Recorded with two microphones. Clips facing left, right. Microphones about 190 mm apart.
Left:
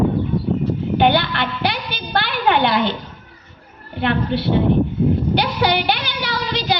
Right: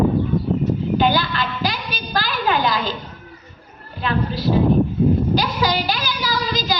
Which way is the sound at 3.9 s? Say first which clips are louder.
Left 3 dB; 65° left (ahead or behind).